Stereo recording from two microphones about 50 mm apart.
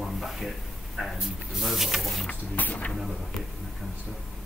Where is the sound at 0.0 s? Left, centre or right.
Centre.